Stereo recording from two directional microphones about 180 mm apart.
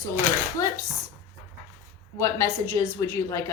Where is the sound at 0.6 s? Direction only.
15° left (ahead or behind).